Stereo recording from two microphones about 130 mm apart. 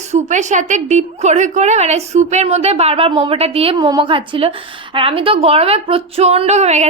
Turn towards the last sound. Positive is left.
turn(degrees=-60)  # may be behind; listen again after turning